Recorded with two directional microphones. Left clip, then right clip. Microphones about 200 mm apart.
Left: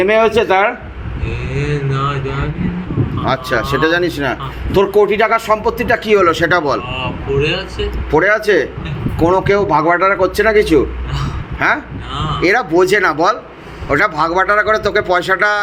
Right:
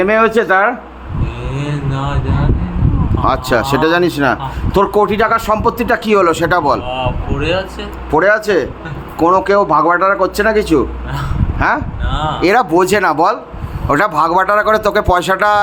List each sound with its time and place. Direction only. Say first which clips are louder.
0.0 s speech: even; 25° right (ahead or behind)
3.2 s speech: right 3 dB; 30° right (ahead or behind)